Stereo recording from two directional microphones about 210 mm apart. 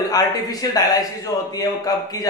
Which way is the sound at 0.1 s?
20° left (ahead or behind).